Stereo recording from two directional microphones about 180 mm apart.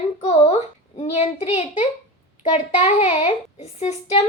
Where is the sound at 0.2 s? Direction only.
35° left (ahead or behind).